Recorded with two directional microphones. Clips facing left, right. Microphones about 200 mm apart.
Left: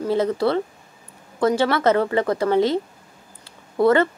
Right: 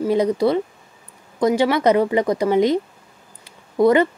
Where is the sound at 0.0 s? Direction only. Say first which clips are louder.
Right 3 dB; 15° right (ahead or behind).